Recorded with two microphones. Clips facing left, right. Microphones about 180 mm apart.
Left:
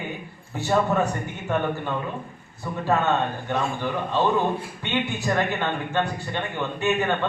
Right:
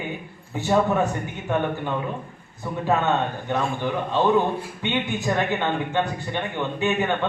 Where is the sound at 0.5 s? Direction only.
15° right (ahead or behind).